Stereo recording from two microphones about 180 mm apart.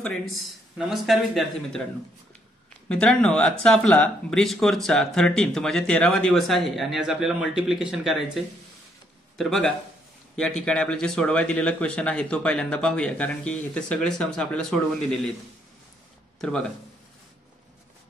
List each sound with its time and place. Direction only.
0.0 s speech: centre (ahead or behind)
2.9 s speech: 5° left (ahead or behind)
9.4 s speech: 5° left (ahead or behind)
16.3 s speech: 5° left (ahead or behind)